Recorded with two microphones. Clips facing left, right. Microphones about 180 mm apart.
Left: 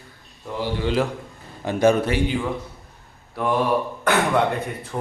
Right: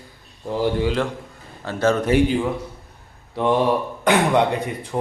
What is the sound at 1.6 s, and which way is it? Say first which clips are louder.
Speech: left 2 dB; 15° left (ahead or behind).